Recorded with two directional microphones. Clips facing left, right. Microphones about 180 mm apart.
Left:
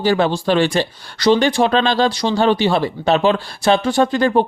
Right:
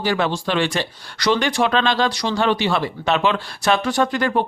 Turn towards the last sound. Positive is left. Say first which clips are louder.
# left 5 dB
turn(degrees=30)  # may be behind; listen again after turning